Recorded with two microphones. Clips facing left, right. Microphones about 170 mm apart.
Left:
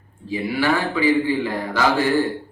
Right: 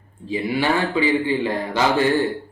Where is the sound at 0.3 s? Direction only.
20° right (ahead or behind).